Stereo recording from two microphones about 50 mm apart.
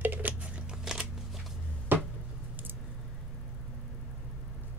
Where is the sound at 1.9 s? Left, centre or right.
Right.